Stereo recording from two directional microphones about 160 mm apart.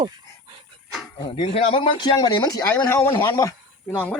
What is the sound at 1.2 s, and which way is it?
Speech, 35° left (ahead or behind).